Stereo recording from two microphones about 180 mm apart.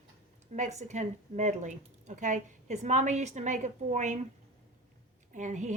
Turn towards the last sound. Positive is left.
turn(degrees=-40)  # may be behind; listen again after turning